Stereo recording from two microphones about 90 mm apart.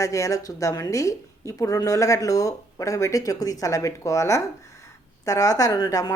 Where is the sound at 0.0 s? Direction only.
35° left (ahead or behind).